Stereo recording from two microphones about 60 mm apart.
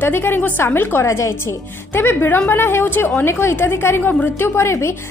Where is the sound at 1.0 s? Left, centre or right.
Left.